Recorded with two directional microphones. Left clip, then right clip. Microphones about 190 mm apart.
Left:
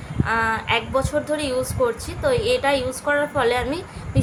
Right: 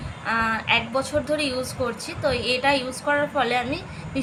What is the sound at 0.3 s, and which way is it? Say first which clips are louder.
A woman's voice: left 1 dB; 20° left (ahead or behind).